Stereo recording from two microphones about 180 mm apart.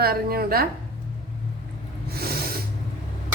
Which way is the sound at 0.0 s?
60° right (ahead or behind).